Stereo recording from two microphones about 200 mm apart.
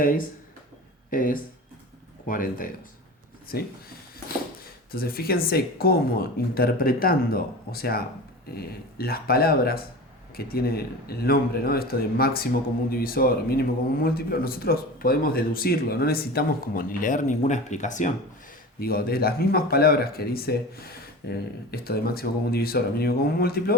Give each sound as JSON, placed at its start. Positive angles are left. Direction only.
{"t": 0.0, "sound": "speech", "side_deg": 45}
{"t": 4.9, "sound": "speech", "side_deg": 50}
{"t": 18.8, "sound": "speech", "side_deg": 50}